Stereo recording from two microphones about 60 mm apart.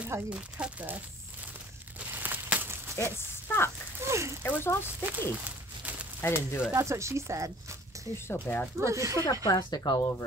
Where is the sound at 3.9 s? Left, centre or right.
Right.